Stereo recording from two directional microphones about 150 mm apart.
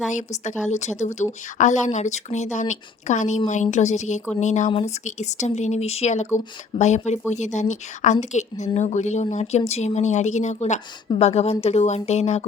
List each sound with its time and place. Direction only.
0.1 s speech: 55° left (ahead or behind)